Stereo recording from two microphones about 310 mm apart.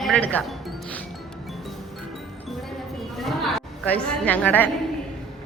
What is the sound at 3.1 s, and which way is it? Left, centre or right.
A woman's voice, centre.